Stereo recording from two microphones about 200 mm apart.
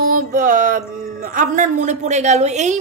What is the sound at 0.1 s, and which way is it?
Music, 45° right (ahead or behind).